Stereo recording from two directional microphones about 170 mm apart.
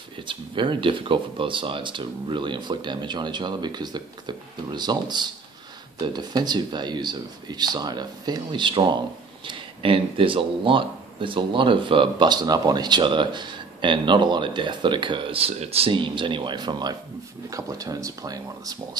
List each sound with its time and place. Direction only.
0.3 s speech: 30° right (ahead or behind)